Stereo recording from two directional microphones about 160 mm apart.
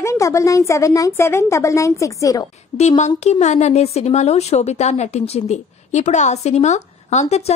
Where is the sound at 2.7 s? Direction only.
45° left (ahead or behind).